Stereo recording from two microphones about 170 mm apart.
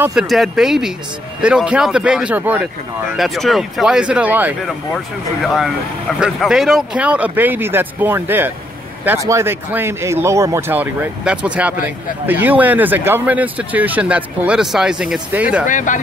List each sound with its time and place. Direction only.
0.0 s speech: 5° right (ahead or behind)
3.2 s speech: centre (ahead or behind)
15.6 s speech: 50° left (ahead or behind)